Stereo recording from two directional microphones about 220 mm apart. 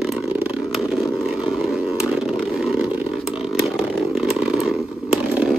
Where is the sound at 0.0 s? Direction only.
Centre (ahead or behind).